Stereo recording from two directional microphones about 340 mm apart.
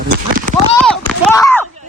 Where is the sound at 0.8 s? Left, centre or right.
Centre.